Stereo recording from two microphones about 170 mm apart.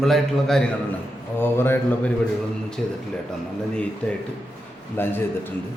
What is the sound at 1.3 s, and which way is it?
A man's voice, 15° left (ahead or behind).